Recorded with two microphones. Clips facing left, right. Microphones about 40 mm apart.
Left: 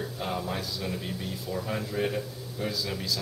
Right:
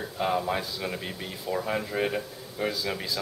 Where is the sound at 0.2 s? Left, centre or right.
Right.